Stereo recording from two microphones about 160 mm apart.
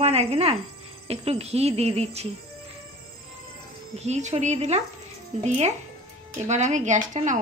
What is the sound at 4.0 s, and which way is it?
Speech, 45° right (ahead or behind).